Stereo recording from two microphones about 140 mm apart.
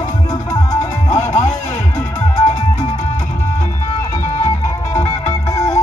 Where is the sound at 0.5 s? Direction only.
25° left (ahead or behind).